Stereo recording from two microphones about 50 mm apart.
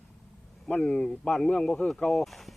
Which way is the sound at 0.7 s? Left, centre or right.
Left.